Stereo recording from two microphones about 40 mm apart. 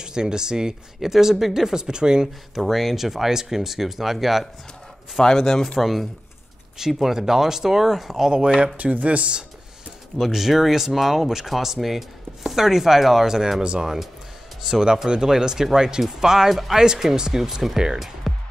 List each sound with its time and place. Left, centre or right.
0.0 s speech: centre
2.5 s speech: centre
5.2 s speech: centre
5.8 s speech: centre
8.3 s speech: right
8.7 s speech: right
10.1 s speech: centre